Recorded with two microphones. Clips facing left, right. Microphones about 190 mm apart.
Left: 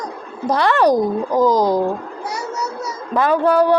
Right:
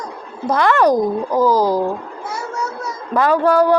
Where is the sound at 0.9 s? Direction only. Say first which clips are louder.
Even; 15° left (ahead or behind).